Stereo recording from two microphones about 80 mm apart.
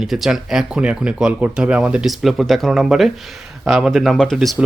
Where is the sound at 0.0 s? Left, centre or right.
Centre.